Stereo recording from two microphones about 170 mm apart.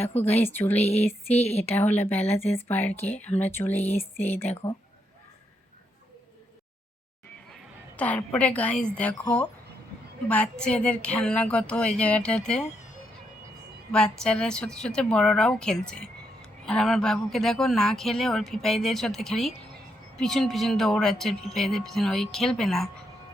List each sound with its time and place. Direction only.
0.3 s speech: 10° left (ahead or behind)
0.8 s a sound: 40° left (ahead or behind)
1.6 s speech: 10° left (ahead or behind)
2.9 s a sound: 40° left (ahead or behind)
3.2 s speech: 10° left (ahead or behind)
3.8 s a sound: 40° left (ahead or behind)
7.9 s speech: 10° left (ahead or behind)
10.2 s speech: 5° left (ahead or behind)
13.9 s speech: 5° left (ahead or behind)